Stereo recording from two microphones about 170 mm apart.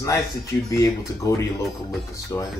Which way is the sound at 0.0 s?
20° left (ahead or behind).